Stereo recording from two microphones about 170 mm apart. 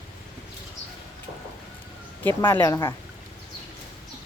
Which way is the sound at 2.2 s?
10° left (ahead or behind).